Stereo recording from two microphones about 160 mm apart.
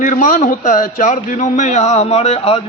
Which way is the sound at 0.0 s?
55° left (ahead or behind).